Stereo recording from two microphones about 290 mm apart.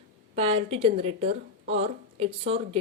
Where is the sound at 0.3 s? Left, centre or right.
Right.